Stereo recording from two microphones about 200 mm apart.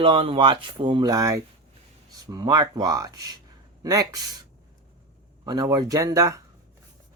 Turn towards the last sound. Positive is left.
turn(degrees=-15)  # may be behind; listen again after turning